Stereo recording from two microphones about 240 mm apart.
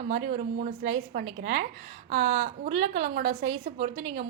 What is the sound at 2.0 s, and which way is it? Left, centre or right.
A woman's voice, right.